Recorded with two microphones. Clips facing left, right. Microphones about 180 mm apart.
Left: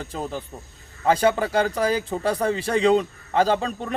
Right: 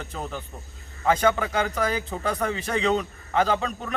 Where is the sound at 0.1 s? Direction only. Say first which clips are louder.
Left 4 dB; 30° left (ahead or behind).